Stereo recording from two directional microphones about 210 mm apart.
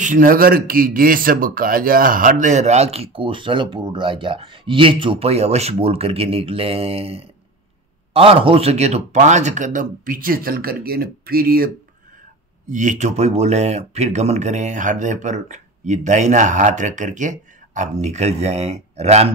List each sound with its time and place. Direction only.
0.0 s speech: 40° right (ahead or behind)